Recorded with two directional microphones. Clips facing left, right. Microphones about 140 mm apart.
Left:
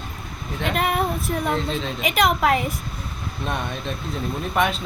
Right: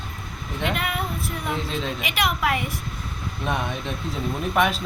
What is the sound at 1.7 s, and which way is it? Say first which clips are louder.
Speech: left 2 dB; centre (ahead or behind).